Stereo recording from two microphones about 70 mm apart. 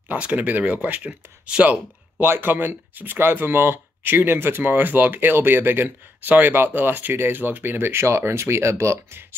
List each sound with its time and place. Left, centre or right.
0.1 s speech: centre; by 9.2 s right